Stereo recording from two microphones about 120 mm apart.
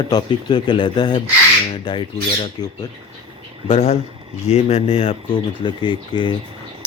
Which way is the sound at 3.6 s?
55° left (ahead or behind).